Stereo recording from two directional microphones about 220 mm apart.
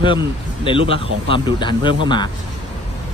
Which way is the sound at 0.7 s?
25° left (ahead or behind).